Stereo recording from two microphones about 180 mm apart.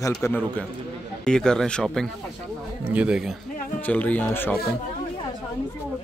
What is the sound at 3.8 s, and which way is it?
Speech, 10° left (ahead or behind).